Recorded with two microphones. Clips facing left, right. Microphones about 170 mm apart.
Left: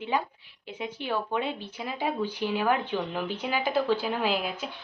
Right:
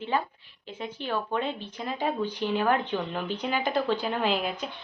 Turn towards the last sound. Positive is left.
turn(degrees=5)  # may be behind; listen again after turning